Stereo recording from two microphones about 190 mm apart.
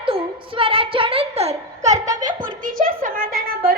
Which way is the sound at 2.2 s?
45° right (ahead or behind).